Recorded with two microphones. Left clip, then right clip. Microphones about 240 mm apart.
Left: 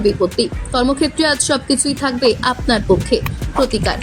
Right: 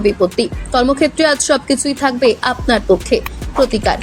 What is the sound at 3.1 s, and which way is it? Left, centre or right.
Speech, right.